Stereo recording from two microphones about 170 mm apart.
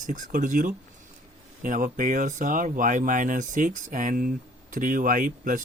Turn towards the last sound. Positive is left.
turn(degrees=-50)  # may be behind; listen again after turning